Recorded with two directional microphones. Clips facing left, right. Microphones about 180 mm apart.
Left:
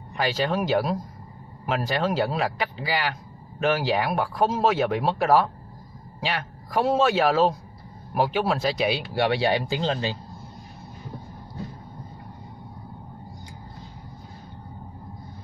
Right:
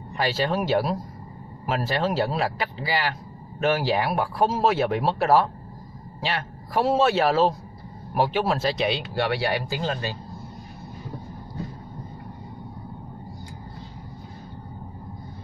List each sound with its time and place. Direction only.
0.2 s a man's voice: centre (ahead or behind)
9.1 s speech: 15° left (ahead or behind)